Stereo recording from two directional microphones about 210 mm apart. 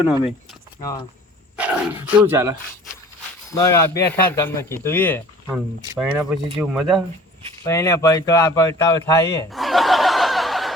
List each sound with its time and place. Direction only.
0.8 s speech: 20° left (ahead or behind)
1.5 s speech: 5° right (ahead or behind)
3.5 s speech: 15° left (ahead or behind)
6.0 s speech: 5° right (ahead or behind)
7.6 s speech: 15° left (ahead or behind)
9.5 s snicker: centre (ahead or behind)